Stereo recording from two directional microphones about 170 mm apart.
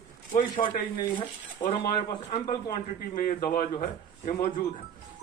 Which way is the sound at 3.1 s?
55° left (ahead or behind).